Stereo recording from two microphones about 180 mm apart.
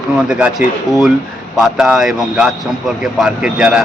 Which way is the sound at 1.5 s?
5° right (ahead or behind).